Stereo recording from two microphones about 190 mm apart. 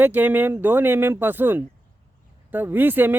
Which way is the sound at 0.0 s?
10° right (ahead or behind).